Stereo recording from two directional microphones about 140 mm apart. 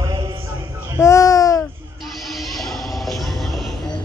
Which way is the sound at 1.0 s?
25° left (ahead or behind).